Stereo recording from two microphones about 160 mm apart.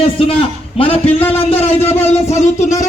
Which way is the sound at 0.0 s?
35° left (ahead or behind).